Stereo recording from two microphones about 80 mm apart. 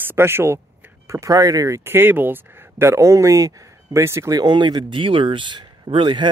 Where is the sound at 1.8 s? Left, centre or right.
Right.